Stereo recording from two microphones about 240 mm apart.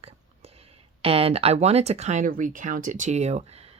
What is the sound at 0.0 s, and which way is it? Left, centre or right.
Speech, right.